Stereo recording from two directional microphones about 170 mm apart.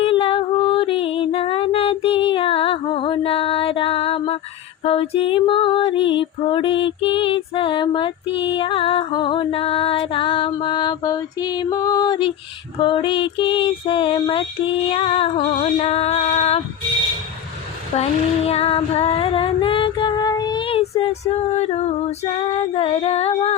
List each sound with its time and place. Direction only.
0.0 s female singing: 30° left (ahead or behind)
17.9 s female singing: 35° left (ahead or behind)